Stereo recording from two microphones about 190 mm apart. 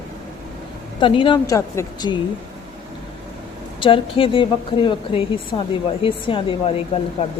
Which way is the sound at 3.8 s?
30° left (ahead or behind).